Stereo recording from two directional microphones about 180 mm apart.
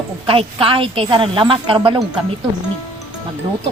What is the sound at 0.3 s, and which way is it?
A woman's voice, 30° right (ahead or behind).